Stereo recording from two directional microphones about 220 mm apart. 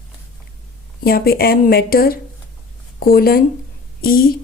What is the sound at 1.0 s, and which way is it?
A woman's voice, 45° left (ahead or behind).